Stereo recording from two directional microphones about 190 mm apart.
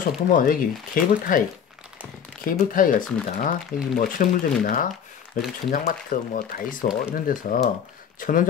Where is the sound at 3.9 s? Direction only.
45° left (ahead or behind).